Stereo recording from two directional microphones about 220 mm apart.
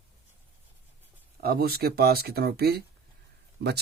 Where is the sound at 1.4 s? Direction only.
45° right (ahead or behind).